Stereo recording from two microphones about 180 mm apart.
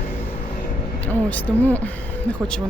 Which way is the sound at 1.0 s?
10° left (ahead or behind).